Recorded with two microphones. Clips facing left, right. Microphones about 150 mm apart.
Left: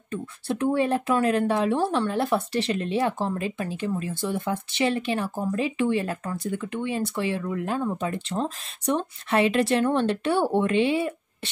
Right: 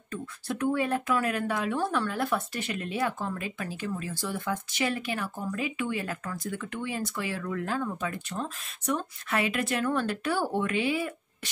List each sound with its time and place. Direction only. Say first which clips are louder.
0.1 s speech: left 5 dB; 30° left (ahead or behind)